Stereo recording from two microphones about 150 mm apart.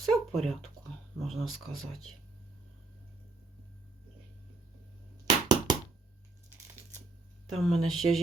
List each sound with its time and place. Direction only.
0.0 s a sound: centre (ahead or behind)
1.2 s speech: centre (ahead or behind)
5.2 s bouncing: 25° right (ahead or behind)
7.5 s speech: centre (ahead or behind)